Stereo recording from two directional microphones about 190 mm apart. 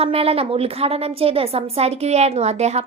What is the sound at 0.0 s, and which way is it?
A child's voice, 30° right (ahead or behind).